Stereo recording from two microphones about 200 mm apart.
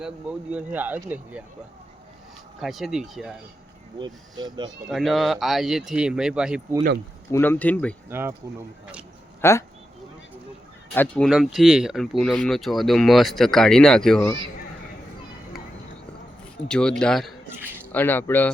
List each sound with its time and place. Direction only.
0.5 s speech: 10° right (ahead or behind)
2.6 s speech: centre (ahead or behind)
3.9 s speech: 20° right (ahead or behind)
4.9 s speech: centre (ahead or behind)
7.3 s speech: 10° left (ahead or behind)
8.1 s speech: 10° right (ahead or behind)
9.4 s speech: 15° left (ahead or behind)
10.9 s speech: 5° left (ahead or behind)
16.6 s speech: 5° left (ahead or behind)